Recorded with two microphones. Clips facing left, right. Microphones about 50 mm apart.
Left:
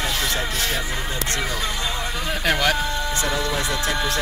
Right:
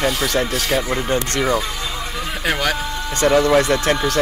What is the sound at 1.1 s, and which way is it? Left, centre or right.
Speech, right.